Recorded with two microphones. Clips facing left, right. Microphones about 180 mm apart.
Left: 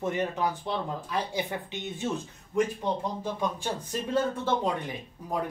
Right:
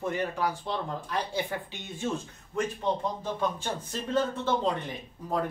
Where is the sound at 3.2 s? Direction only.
10° left (ahead or behind).